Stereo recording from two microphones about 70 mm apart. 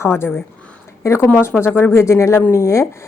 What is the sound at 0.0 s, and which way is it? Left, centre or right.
Speech, left.